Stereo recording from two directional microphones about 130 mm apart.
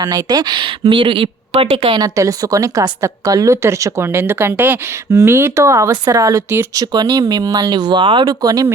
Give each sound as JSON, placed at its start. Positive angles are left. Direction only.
{"t": 0.0, "sound": "a woman's voice", "side_deg": -30}
{"t": 2.0, "sound": "a woman's voice", "side_deg": -25}